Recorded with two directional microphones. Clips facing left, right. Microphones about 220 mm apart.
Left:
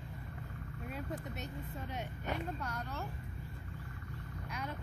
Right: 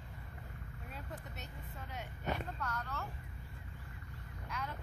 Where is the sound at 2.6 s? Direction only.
15° left (ahead or behind).